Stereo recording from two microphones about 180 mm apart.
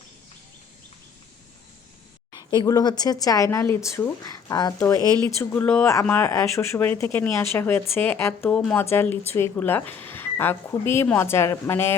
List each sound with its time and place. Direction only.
2.3 s speech: 20° left (ahead or behind)